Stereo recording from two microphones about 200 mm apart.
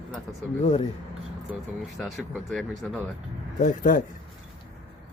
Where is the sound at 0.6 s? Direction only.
35° left (ahead or behind).